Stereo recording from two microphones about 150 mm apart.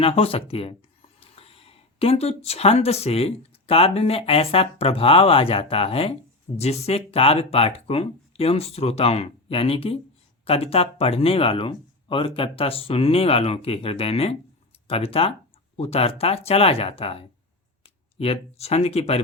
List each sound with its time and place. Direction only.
0.0 s speech: 40° left (ahead or behind)